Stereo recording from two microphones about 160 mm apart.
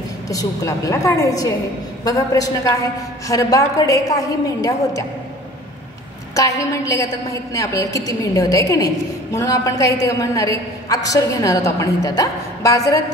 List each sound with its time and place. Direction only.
0.3 s a woman's voice: 20° left (ahead or behind)
6.3 s a woman's voice: 20° left (ahead or behind)